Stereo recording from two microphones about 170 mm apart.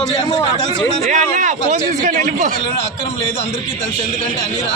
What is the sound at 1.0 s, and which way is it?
A man's voice, 45° right (ahead or behind).